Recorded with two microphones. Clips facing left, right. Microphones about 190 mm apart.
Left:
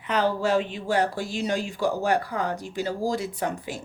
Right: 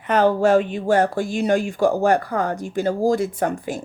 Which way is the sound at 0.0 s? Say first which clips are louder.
Right 7 dB; 50° right (ahead or behind).